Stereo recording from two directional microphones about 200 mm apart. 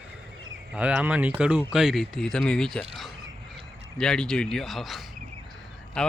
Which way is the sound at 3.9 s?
5° left (ahead or behind).